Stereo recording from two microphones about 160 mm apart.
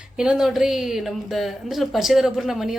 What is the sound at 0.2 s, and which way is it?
Speech, 5° right (ahead or behind).